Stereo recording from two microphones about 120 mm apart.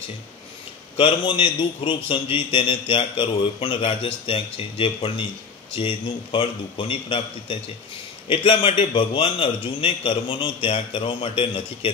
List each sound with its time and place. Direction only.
0.9 s a man's voice: 45° left (ahead or behind)